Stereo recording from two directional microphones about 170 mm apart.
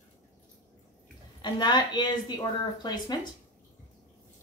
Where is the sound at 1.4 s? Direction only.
25° left (ahead or behind).